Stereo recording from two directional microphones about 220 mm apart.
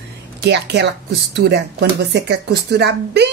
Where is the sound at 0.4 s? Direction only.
50° right (ahead or behind).